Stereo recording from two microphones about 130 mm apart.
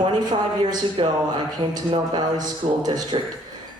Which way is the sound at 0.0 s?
35° right (ahead or behind).